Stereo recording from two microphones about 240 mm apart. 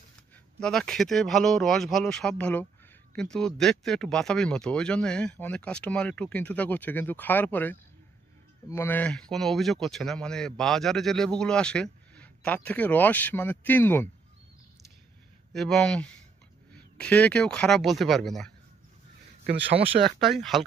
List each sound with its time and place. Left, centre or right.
0.6 s speech: centre
15.5 s speech: centre
19.7 s speech: right
20.2 s speech: centre